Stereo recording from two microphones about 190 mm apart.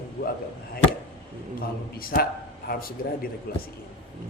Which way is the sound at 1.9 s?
50° left (ahead or behind).